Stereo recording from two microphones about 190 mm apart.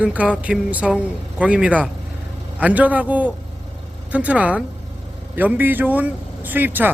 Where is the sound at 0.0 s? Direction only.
5° right (ahead or behind).